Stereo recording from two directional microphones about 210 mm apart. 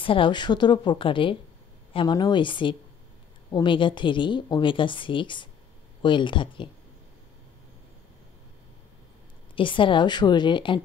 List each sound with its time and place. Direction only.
0.0 s a woman's voice: 25° left (ahead or behind)
9.6 s a woman's voice: 25° left (ahead or behind)